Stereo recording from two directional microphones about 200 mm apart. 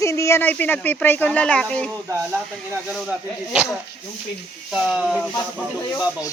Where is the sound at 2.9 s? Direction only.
5° right (ahead or behind).